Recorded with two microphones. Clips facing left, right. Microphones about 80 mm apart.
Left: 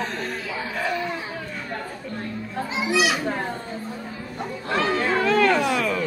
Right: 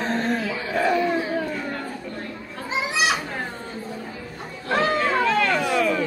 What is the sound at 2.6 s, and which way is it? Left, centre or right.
Children playing, right.